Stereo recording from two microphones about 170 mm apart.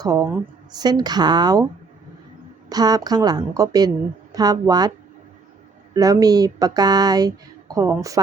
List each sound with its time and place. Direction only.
0.0 s a woman's voice: 20° right (ahead or behind)
2.6 s a woman's voice: 20° right (ahead or behind)
5.9 s a woman's voice: 20° right (ahead or behind)